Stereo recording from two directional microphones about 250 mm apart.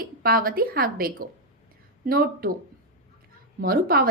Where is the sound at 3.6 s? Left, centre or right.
Right.